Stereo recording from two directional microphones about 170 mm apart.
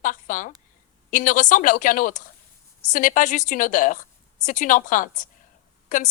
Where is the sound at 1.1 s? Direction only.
50° left (ahead or behind).